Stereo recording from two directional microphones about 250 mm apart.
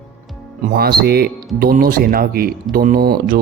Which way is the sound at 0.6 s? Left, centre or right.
Right.